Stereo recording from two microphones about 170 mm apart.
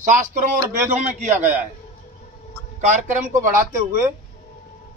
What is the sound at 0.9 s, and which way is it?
Speech, 45° right (ahead or behind).